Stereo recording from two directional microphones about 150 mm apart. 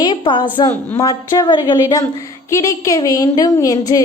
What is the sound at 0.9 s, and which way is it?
A woman's voice, 20° left (ahead or behind).